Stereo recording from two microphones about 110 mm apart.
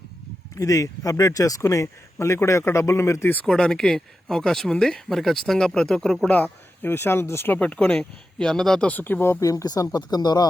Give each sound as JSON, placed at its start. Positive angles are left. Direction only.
{"t": 0.5, "sound": "speech", "side_deg": 30}
{"t": 3.4, "sound": "speech", "side_deg": 5}
{"t": 8.9, "sound": "speech", "side_deg": 15}